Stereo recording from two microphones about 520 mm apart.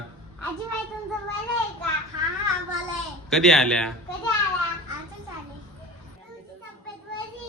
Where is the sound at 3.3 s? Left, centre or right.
Centre.